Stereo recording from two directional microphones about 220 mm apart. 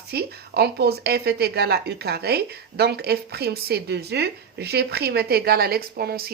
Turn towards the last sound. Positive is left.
turn(degrees=-45)  # may be behind; listen again after turning